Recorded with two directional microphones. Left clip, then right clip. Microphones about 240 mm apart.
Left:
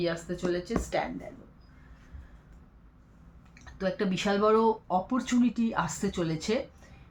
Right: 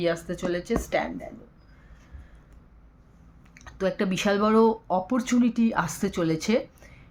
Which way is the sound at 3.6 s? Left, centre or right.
Right.